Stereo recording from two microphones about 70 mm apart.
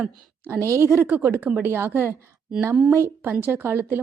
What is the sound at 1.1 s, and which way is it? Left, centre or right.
A woman's voice, right.